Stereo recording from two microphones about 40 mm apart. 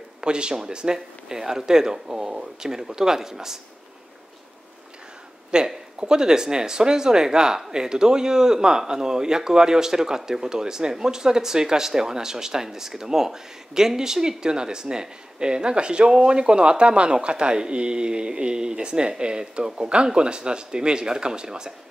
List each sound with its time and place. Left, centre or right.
0.2 s speech: right
5.5 s speech: right